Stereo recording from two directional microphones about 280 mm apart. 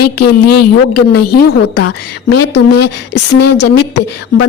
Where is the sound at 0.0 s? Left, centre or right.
Left.